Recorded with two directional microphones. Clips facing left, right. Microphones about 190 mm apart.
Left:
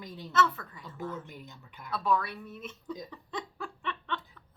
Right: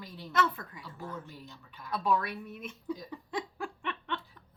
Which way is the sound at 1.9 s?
15° right (ahead or behind).